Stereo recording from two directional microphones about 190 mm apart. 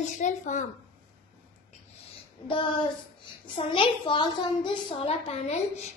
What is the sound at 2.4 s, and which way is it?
A child's voice, 25° left (ahead or behind).